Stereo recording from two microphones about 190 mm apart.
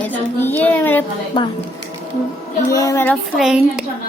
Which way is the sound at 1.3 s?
25° left (ahead or behind).